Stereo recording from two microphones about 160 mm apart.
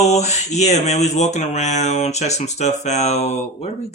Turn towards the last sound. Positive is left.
turn(degrees=40)  # may be behind; listen again after turning